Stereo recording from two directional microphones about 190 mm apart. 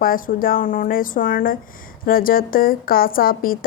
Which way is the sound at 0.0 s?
50° left (ahead or behind).